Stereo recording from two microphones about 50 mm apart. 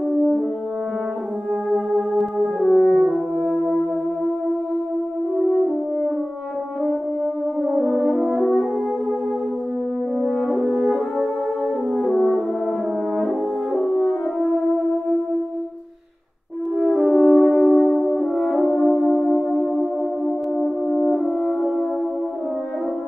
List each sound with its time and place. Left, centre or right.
0.1 s french horn: centre
1.7 s music: centre
3.0 s french horn: centre
7.6 s french horn: centre
10.5 s french horn: centre
11.9 s french horn: centre
13.7 s french horn: centre
16.9 s french horn: centre
19.5 s music: centre
20.6 s french horn: centre